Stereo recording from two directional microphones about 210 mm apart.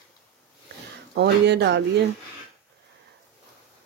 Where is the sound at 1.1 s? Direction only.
55° right (ahead or behind).